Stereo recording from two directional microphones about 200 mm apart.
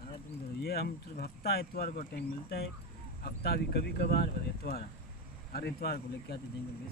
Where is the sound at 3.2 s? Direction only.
50° left (ahead or behind).